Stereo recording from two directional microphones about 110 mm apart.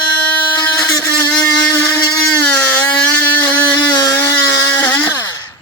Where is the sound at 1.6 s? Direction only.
15° left (ahead or behind).